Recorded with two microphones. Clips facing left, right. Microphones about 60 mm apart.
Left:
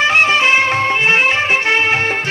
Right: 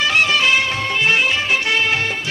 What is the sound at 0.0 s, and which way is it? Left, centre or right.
Music, left.